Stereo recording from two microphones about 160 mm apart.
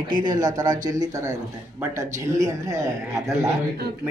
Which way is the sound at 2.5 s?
20° right (ahead or behind).